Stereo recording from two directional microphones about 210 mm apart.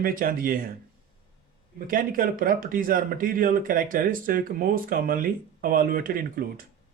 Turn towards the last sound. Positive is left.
turn(degrees=-40)  # may be behind; listen again after turning